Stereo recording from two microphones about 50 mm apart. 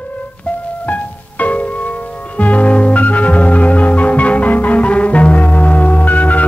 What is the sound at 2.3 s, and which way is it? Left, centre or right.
Music, left.